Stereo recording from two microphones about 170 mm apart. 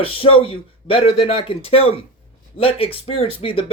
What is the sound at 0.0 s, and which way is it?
Speech, 30° left (ahead or behind).